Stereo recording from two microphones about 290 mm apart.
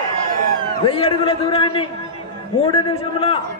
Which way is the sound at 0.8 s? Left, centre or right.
Centre.